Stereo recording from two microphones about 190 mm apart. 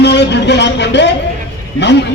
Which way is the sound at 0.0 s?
65° left (ahead or behind).